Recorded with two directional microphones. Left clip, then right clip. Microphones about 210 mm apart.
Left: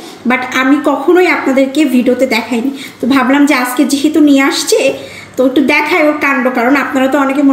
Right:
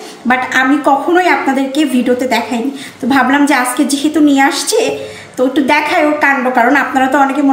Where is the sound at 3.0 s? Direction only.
25° right (ahead or behind).